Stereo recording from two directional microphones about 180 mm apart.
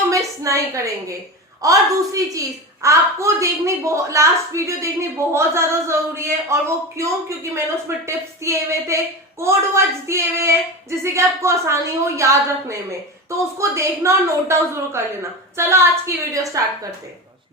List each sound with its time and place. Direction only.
0.1 s a sound: 15° right (ahead or behind)
1.6 s a woman's voice: 20° right (ahead or behind)
2.8 s a woman's voice: 15° right (ahead or behind)